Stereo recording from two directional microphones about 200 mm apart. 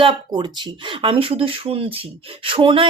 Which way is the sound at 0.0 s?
25° right (ahead or behind).